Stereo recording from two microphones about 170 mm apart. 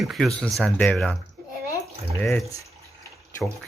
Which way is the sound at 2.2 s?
5° left (ahead or behind).